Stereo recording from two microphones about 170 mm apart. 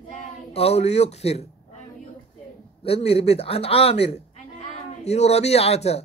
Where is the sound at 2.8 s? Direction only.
35° left (ahead or behind).